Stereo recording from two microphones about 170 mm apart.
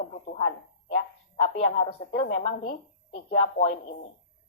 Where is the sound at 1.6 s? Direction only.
35° left (ahead or behind).